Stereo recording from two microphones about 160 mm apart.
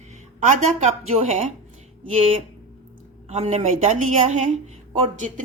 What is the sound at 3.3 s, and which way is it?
A woman's voice, 45° right (ahead or behind).